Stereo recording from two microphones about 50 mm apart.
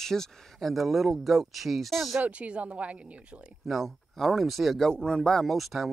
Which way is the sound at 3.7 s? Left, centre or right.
Centre.